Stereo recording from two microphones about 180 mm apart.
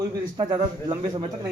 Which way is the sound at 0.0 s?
20° right (ahead or behind).